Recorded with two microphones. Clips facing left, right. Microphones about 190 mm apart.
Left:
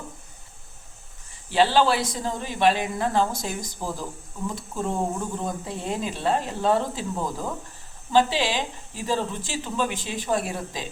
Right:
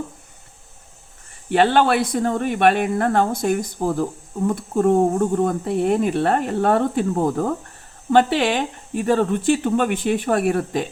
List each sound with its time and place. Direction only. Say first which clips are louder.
1.5 s speech: right 4 dB; 60° right (ahead or behind)